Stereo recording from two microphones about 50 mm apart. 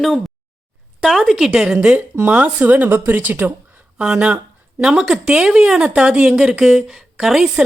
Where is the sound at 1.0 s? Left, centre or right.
Centre.